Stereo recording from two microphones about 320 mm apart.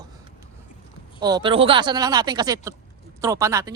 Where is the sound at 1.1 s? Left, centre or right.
Centre.